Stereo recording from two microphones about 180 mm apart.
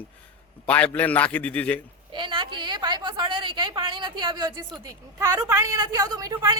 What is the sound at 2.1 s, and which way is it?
A woman's voice, 25° right (ahead or behind).